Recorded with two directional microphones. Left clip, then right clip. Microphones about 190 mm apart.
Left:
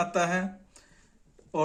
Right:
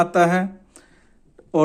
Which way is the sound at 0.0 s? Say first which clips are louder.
Right 10 dB; 45° right (ahead or behind).